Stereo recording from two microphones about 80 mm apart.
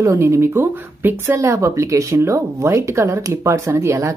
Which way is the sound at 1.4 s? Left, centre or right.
Right.